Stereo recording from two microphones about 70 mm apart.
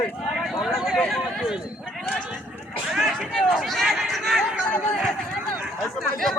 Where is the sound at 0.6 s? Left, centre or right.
Centre.